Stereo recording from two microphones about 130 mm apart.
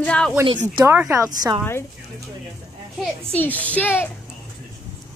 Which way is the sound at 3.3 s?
10° left (ahead or behind).